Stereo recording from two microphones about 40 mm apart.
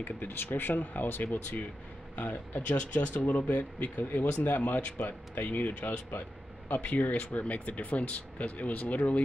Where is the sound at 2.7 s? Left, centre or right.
Left.